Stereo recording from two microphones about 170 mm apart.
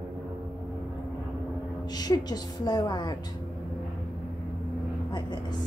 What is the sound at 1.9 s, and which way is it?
Speech, 25° left (ahead or behind).